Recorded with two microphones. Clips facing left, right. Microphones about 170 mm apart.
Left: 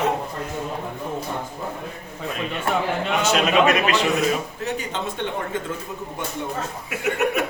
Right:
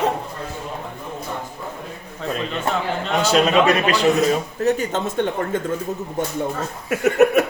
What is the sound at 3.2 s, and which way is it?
Speech, 35° right (ahead or behind).